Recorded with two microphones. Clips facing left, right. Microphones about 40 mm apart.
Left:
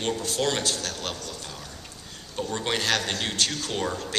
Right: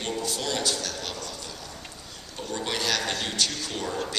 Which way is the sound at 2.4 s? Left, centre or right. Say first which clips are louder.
Left 2 dB; left.